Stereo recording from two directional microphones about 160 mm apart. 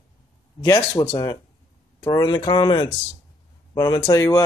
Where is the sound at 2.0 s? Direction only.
25° left (ahead or behind).